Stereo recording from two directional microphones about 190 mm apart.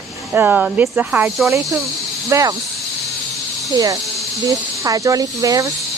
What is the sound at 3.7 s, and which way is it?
Speech, 20° right (ahead or behind).